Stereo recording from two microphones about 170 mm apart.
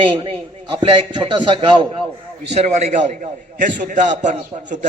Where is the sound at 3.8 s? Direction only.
45° right (ahead or behind).